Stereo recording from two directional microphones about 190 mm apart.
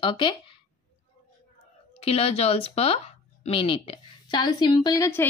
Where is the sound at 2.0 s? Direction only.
30° left (ahead or behind).